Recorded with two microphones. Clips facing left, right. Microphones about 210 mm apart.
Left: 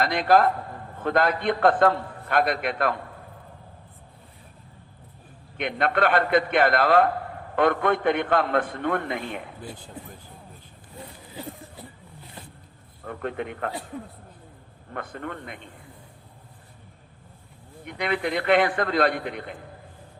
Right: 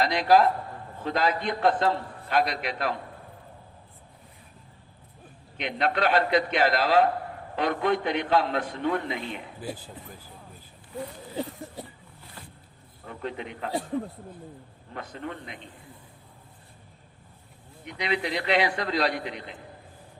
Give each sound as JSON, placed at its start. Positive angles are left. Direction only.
{"t": 0.0, "sound": "a man's voice", "side_deg": 55}
{"t": 5.5, "sound": "a man's voice", "side_deg": 55}
{"t": 13.1, "sound": "a man's voice", "side_deg": 55}
{"t": 14.9, "sound": "a man's voice", "side_deg": 55}
{"t": 17.8, "sound": "a man's voice", "side_deg": 55}